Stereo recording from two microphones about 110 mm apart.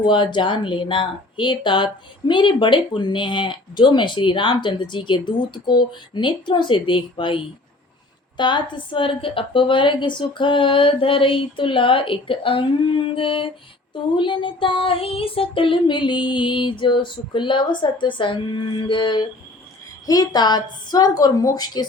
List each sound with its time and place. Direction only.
0.0 s a woman's voice: 45° left (ahead or behind)